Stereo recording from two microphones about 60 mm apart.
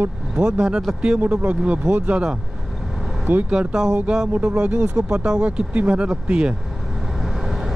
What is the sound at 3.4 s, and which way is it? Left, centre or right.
Speech, centre.